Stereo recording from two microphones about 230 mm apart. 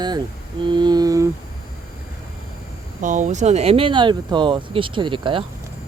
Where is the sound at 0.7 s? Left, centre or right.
Centre.